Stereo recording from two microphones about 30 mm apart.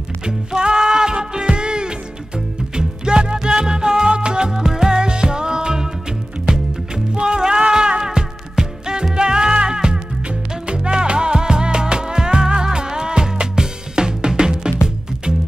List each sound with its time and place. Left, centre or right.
0.3 s music: right
7.2 s music: right
8.6 s music: centre
9.1 s music: right